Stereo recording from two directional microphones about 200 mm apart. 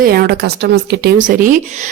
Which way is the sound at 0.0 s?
50° right (ahead or behind).